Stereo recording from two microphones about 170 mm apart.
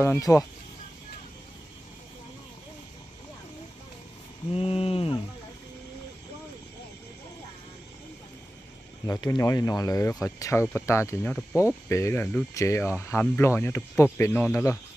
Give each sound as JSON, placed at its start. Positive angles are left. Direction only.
{"t": 0.0, "sound": "speech", "side_deg": 20}
{"t": 4.5, "sound": "a sound", "side_deg": 35}
{"t": 9.0, "sound": "speech", "side_deg": 20}